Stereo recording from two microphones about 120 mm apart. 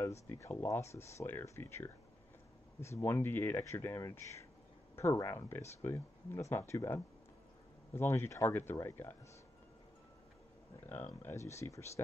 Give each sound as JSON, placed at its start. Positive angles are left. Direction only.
{"t": 0.0, "sound": "speech", "side_deg": 25}
{"t": 10.9, "sound": "speech", "side_deg": 20}